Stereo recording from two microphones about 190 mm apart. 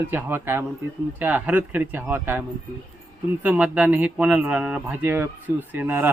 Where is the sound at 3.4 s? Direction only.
10° right (ahead or behind).